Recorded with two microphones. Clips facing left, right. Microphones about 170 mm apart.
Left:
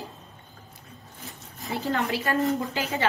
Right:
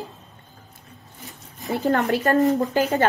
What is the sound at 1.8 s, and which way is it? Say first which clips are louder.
Speech: right 7 dB; 45° right (ahead or behind).